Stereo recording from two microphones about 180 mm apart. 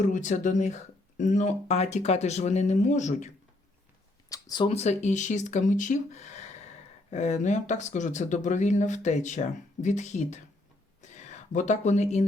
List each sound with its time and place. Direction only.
0.0 s speech: 45° left (ahead or behind)
4.3 s speech: 20° left (ahead or behind); by 10.4 s 40° left (ahead or behind)
11.0 s a sound: 40° left (ahead or behind)